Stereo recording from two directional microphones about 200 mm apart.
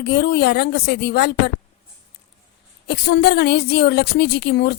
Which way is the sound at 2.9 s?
55° left (ahead or behind).